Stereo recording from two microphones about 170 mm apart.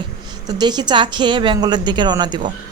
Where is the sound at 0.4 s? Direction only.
25° right (ahead or behind).